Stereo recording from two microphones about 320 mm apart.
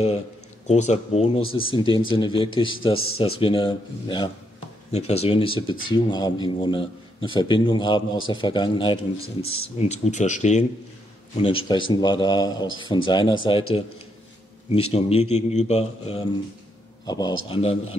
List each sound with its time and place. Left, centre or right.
0.7 s a man's voice: left
14.7 s a man's voice: centre